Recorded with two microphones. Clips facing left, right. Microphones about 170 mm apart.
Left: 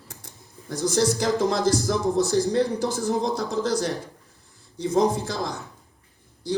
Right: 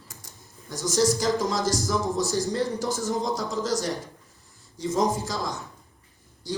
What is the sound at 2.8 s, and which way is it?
Speech, 60° left (ahead or behind).